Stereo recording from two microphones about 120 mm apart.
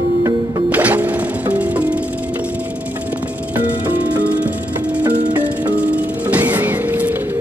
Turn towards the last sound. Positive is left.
turn(degrees=-15)  # may be behind; listen again after turning